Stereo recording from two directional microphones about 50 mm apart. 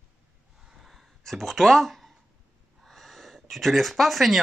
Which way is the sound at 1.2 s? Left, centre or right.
Centre.